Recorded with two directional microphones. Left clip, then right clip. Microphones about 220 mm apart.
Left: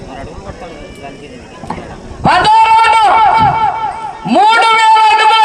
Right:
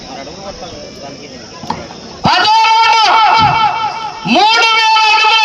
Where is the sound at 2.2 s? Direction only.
45° right (ahead or behind).